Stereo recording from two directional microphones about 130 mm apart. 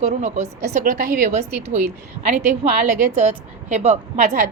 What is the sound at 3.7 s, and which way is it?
Speech, 60° right (ahead or behind).